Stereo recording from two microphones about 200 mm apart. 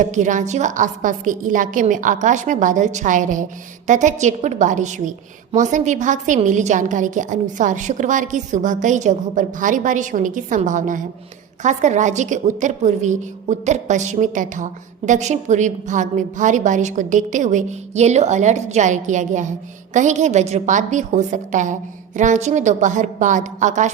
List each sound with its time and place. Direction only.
0.0 s a woman's voice: 40° right (ahead or behind)